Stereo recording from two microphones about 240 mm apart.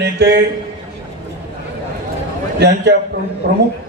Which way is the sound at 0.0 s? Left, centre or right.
Right.